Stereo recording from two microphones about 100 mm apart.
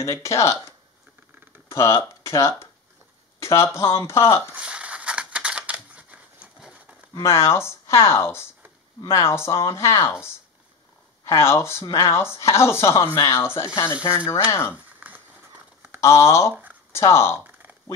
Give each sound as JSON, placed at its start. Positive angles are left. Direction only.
{"t": 0.0, "sound": "speech", "side_deg": 30}
{"t": 1.7, "sound": "speech", "side_deg": 30}
{"t": 4.6, "sound": "scissors", "side_deg": -10}
{"t": 7.2, "sound": "speech", "side_deg": 30}
{"t": 11.2, "sound": "speech", "side_deg": 25}
{"t": 15.0, "sound": "a sound", "side_deg": -20}
{"t": 16.0, "sound": "speech", "side_deg": 30}
{"t": 17.4, "sound": "a sound", "side_deg": -15}